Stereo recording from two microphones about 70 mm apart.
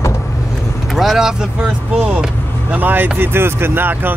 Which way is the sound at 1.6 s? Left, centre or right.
Centre.